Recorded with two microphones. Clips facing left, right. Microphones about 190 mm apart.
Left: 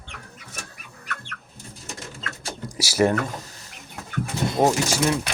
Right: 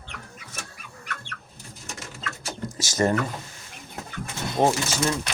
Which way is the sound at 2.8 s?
10° left (ahead or behind).